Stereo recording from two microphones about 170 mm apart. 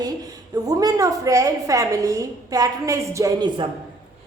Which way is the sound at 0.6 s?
20° right (ahead or behind).